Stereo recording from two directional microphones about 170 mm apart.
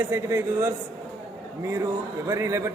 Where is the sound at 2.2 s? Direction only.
15° right (ahead or behind).